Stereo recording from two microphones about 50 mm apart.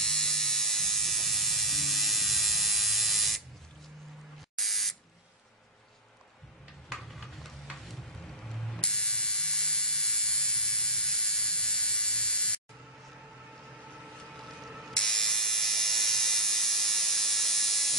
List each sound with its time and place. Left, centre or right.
0.0 s electric shaver: centre
4.6 s buzzer: centre
6.9 s a sound: centre
8.8 s electric shaver: centre
14.4 s a sound: centre
15.0 s electric toothbrush: centre